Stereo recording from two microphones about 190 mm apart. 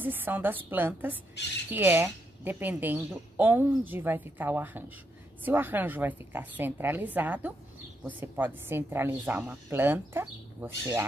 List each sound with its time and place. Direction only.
0.0 s a woman's voice: 10° right (ahead or behind)
1.4 s speech: 65° left (ahead or behind)
1.7 s a woman's voice: 10° right (ahead or behind)